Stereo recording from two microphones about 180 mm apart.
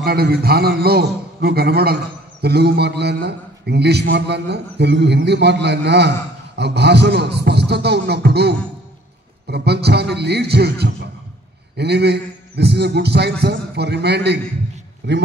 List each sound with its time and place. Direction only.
0.0 s a man's voice: 60° right (ahead or behind)